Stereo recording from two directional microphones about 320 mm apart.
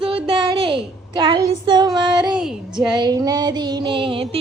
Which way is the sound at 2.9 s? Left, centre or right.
Centre.